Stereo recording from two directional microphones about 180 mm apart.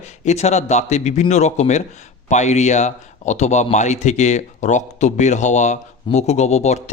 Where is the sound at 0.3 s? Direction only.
40° left (ahead or behind).